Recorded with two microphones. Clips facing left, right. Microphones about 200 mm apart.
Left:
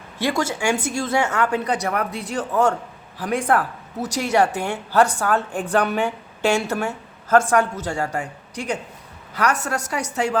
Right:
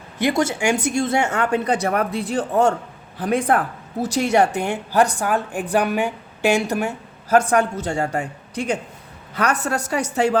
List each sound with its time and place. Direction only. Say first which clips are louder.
0.2 s a woman's voice: right 3 dB; 20° right (ahead or behind)